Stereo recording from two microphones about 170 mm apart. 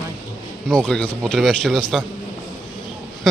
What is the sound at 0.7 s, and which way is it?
A man's voice, 5° left (ahead or behind).